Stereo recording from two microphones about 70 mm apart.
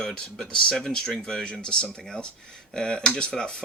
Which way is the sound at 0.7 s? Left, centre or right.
Centre.